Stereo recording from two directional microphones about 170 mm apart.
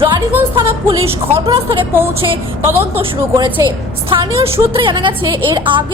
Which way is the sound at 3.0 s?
25° right (ahead or behind).